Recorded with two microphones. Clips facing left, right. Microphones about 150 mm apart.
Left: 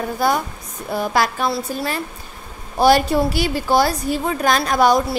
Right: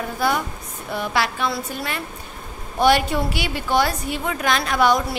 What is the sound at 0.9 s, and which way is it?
Speech, 40° left (ahead or behind).